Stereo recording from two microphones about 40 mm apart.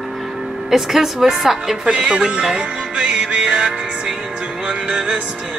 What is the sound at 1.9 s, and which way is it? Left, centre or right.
Speech, right.